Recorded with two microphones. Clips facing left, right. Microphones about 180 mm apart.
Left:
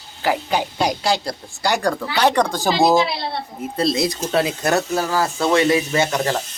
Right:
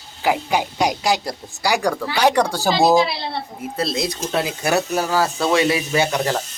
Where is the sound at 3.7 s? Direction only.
Centre (ahead or behind).